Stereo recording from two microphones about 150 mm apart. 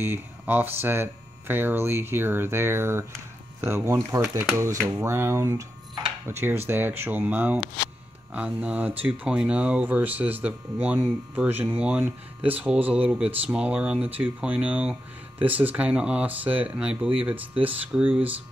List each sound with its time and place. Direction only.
0.0 s speech: 15° right (ahead or behind)